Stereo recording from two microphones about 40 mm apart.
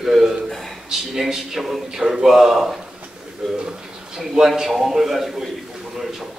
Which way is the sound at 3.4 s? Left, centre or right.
Centre.